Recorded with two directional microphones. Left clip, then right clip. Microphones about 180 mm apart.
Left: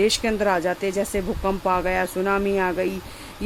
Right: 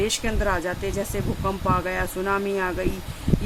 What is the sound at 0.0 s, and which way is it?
Speech, 30° left (ahead or behind).